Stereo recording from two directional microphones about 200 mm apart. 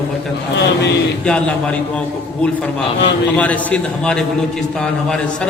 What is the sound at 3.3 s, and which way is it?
Speech, 5° left (ahead or behind).